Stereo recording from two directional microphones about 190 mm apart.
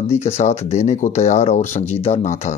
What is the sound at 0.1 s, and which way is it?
Speech, 35° left (ahead or behind).